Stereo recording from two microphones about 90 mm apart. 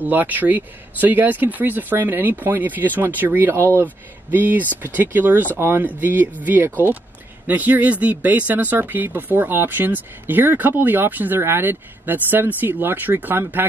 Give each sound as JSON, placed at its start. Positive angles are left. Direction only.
{"t": 0.0, "sound": "speech", "side_deg": -20}